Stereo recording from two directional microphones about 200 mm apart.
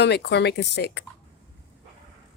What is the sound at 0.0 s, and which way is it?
Speech, 55° left (ahead or behind).